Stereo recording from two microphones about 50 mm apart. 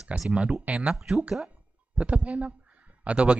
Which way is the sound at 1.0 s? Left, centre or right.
Centre.